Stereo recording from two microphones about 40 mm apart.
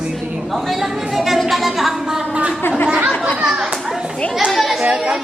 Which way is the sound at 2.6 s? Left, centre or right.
Left.